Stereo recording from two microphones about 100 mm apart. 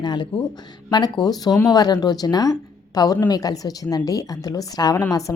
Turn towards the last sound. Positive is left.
turn(degrees=30)  # may be behind; listen again after turning